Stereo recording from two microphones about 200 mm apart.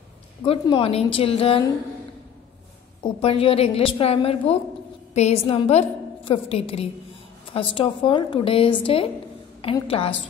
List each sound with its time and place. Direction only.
0.5 s a woman's voice: 25° left (ahead or behind)
3.0 s a woman's voice: 25° left (ahead or behind)